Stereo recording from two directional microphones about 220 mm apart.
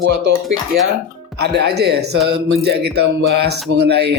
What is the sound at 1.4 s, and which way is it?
Speech, 50° right (ahead or behind).